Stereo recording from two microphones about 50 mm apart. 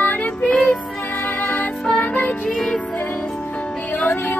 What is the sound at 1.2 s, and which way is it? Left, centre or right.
Music, left.